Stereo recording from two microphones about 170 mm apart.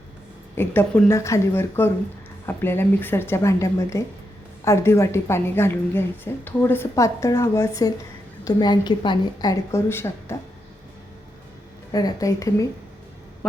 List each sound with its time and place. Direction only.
0.5 s a woman's voice: 15° left (ahead or behind)
11.9 s a woman's voice: 20° left (ahead or behind)